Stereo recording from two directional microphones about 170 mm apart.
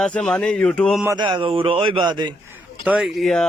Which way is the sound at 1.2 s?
25° right (ahead or behind).